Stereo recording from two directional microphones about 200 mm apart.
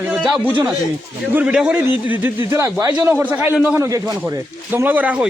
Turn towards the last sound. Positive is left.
turn(degrees=-10)  # may be behind; listen again after turning